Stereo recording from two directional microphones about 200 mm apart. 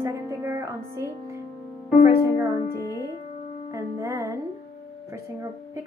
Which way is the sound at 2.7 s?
15° left (ahead or behind).